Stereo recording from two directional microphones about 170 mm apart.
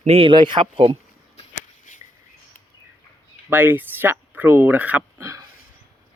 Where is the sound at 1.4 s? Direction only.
45° left (ahead or behind).